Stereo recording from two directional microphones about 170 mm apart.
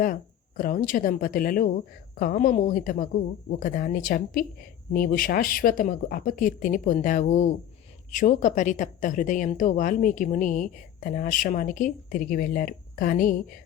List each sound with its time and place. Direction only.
0.0 s a woman's voice: 55° left (ahead or behind)